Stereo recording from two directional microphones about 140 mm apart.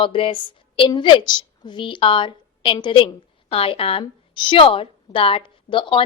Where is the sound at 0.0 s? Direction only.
40° left (ahead or behind).